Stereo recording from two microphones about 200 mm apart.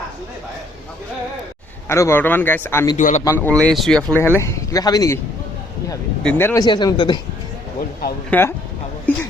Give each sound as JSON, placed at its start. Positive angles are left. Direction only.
{"t": 1.9, "sound": "speech", "side_deg": 15}
{"t": 3.0, "sound": "a man's voice", "side_deg": 35}
{"t": 3.2, "sound": "speech", "side_deg": 10}
{"t": 6.2, "sound": "speech", "side_deg": 10}
{"t": 8.3, "sound": "speech", "side_deg": 10}